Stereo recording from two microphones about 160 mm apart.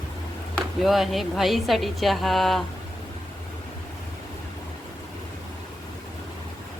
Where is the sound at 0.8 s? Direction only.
Centre (ahead or behind).